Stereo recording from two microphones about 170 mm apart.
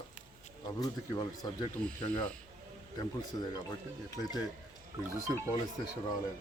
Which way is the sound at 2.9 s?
25° left (ahead or behind).